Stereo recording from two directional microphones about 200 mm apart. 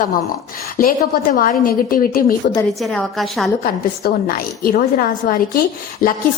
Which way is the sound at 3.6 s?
45° left (ahead or behind).